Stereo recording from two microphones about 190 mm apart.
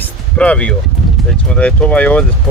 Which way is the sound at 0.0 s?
5° left (ahead or behind).